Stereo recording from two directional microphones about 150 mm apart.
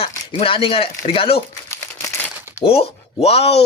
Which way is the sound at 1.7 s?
20° left (ahead or behind).